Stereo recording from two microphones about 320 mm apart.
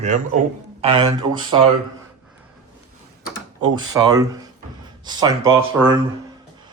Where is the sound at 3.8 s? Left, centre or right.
Centre.